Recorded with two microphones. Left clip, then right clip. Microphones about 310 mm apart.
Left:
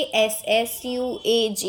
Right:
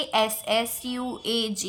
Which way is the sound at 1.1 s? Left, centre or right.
Right.